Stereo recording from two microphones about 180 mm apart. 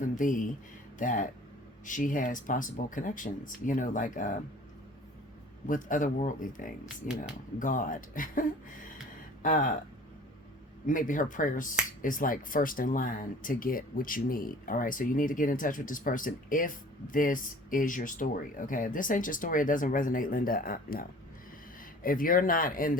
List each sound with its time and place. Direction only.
0.2 s speech: 45° left (ahead or behind)
5.6 s speech: 45° left (ahead or behind)
9.4 s a sound: 45° left (ahead or behind)
10.8 s speech: 45° left (ahead or behind)